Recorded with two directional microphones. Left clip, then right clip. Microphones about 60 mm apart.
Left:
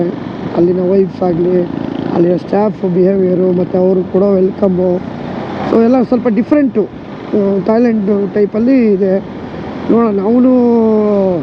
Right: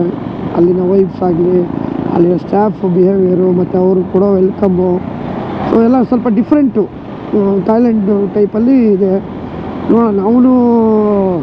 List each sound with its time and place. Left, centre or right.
0.5 s speech: left